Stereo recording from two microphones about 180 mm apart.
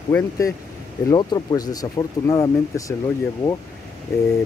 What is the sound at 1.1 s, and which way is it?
Speech, 20° left (ahead or behind).